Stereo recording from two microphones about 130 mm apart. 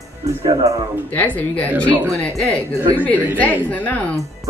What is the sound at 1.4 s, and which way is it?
Speech, 10° left (ahead or behind).